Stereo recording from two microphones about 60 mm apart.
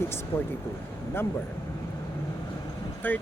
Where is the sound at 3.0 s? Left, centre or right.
Left.